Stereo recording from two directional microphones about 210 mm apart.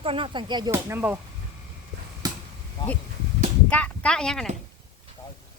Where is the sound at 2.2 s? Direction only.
20° right (ahead or behind).